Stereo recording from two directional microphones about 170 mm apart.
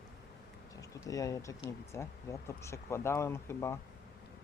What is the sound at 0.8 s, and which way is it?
Speech, 20° left (ahead or behind).